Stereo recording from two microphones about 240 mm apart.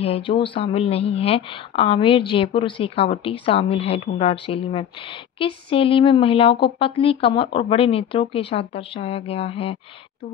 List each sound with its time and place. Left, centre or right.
0.0 s speech: left